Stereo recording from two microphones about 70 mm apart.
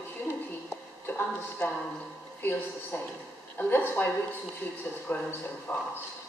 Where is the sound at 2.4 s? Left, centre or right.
Left.